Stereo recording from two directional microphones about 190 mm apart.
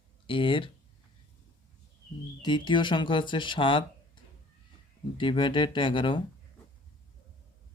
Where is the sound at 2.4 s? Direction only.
25° left (ahead or behind).